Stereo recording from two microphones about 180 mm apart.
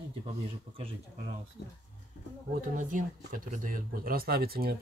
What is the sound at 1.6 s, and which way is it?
Speech, 70° left (ahead or behind).